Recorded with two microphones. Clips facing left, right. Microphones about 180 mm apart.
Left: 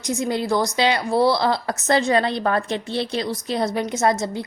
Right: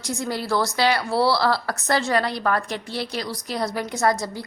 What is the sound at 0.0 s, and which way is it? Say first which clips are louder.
A woman's voice: left 4 dB; 20° left (ahead or behind).